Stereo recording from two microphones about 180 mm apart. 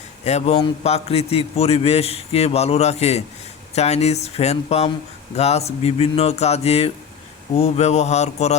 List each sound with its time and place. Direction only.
0.3 s a man's voice: 40° left (ahead or behind)